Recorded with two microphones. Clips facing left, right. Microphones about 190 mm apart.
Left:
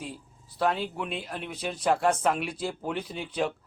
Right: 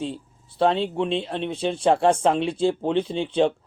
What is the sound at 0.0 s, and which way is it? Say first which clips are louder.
Speech: right 9 dB; 25° right (ahead or behind).